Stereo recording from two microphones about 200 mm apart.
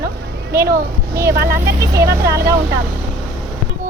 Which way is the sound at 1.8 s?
15° right (ahead or behind).